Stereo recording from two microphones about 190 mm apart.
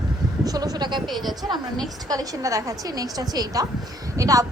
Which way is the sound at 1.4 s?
25° right (ahead or behind).